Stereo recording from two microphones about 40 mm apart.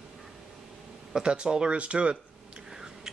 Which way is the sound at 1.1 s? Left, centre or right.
Centre.